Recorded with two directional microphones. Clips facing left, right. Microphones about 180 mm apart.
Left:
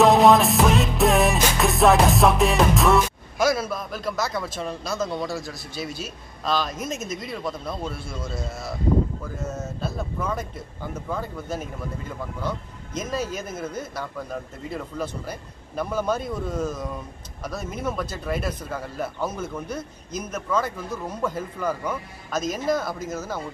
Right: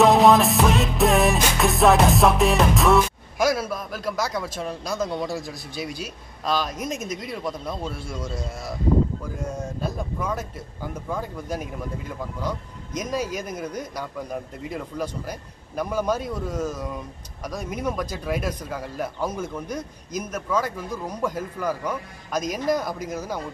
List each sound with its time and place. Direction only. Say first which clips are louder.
0.0 s music: even; centre (ahead or behind)
3.3 s a man's voice: even; 10° right (ahead or behind)
9.4 s a man's voice: right 1 dB; 15° right (ahead or behind)